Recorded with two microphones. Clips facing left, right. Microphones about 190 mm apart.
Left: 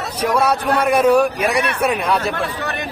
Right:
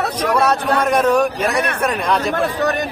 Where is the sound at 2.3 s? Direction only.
45° right (ahead or behind).